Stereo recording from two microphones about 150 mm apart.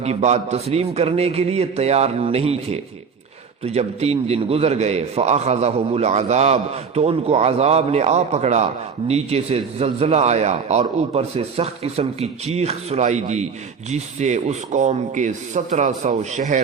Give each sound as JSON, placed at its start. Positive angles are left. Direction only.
{"t": 0.0, "sound": "a man's voice", "side_deg": -45}